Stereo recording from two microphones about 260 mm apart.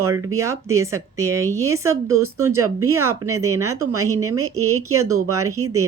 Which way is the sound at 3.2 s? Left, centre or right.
Right.